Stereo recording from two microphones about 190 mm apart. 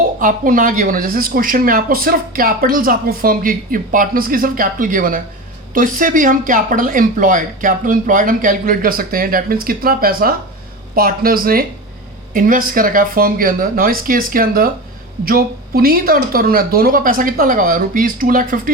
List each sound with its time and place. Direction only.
0.2 s speech: 45° right (ahead or behind)